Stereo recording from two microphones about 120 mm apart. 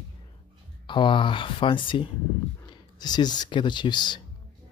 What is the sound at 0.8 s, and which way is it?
Speech, 40° left (ahead or behind).